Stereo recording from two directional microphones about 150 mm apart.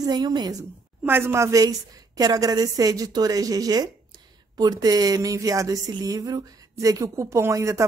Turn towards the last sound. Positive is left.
turn(degrees=-20)  # may be behind; listen again after turning